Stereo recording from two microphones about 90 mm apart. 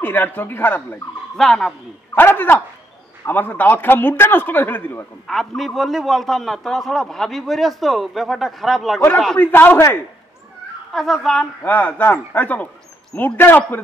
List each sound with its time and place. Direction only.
0.0 s a man's voice: 20° left (ahead or behind)
1.3 s a man's voice: 5° left (ahead or behind)
2.1 s a man's voice: 25° left (ahead or behind)
5.6 s a man's voice: centre (ahead or behind)
9.4 s a man's voice: 20° left (ahead or behind)
10.9 s a man's voice: 5° left (ahead or behind)
11.6 s a man's voice: 20° left (ahead or behind)